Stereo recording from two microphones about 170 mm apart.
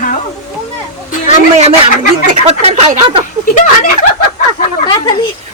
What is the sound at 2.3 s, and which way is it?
Speech, 45° right (ahead or behind).